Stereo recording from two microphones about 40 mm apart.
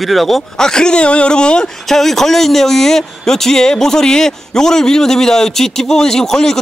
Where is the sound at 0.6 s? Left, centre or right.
Centre.